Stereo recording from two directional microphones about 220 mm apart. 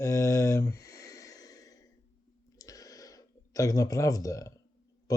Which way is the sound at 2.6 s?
15° left (ahead or behind).